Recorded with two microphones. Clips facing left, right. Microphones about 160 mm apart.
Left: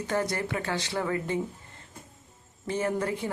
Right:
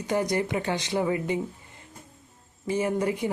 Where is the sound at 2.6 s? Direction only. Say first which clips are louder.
Right 3 dB; 15° right (ahead or behind).